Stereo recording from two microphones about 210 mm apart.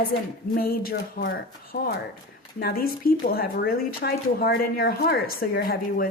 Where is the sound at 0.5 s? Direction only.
45° left (ahead or behind).